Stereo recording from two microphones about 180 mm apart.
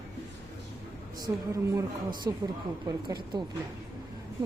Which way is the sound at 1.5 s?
15° right (ahead or behind).